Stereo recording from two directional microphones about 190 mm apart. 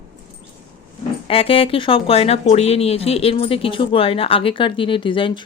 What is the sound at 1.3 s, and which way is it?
Speech, 30° left (ahead or behind).